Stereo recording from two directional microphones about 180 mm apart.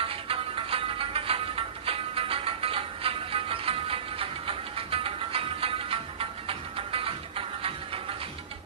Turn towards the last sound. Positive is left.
turn(degrees=-30)  # may be behind; listen again after turning